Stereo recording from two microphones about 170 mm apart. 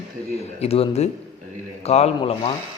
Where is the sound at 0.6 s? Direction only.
35° left (ahead or behind).